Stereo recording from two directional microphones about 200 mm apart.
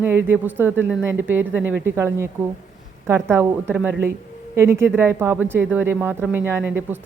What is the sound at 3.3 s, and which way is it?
A man's voice, 10° right (ahead or behind).